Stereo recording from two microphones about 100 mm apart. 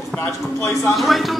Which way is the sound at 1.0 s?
Centre (ahead or behind).